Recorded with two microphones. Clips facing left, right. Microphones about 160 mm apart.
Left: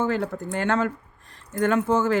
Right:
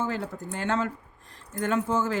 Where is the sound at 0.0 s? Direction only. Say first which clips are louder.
Left 6 dB; 65° left (ahead or behind).